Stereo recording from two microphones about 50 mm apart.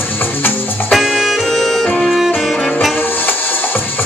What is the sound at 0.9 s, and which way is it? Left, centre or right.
Music, centre.